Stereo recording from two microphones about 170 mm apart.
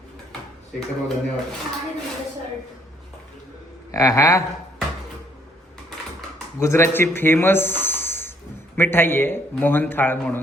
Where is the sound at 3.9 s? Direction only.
20° left (ahead or behind).